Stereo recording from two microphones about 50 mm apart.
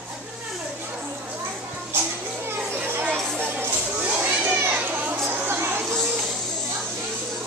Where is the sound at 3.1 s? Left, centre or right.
Right.